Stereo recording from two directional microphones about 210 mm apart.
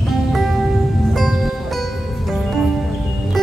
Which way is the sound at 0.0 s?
Centre (ahead or behind).